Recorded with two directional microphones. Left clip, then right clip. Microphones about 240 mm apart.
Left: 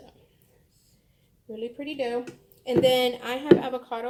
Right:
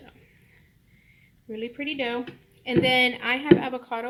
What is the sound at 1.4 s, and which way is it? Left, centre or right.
Speech, right.